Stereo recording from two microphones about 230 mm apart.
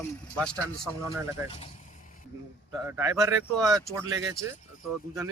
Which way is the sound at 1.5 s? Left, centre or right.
Left.